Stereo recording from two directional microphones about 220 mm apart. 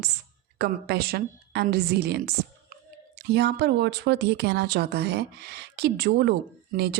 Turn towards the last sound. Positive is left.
turn(degrees=-45)  # may be behind; listen again after turning